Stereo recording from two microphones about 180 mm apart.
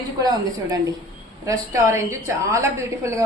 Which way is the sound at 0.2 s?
20° right (ahead or behind).